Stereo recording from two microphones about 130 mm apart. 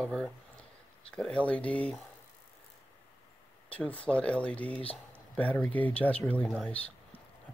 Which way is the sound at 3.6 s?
10° left (ahead or behind).